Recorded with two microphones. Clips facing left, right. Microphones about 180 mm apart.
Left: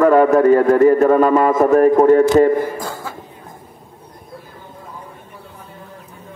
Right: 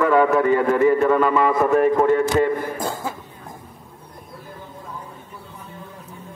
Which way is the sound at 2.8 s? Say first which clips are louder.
Right 1 dB; 20° right (ahead or behind).